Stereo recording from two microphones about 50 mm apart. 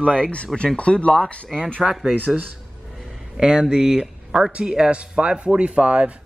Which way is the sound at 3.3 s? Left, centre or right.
Centre.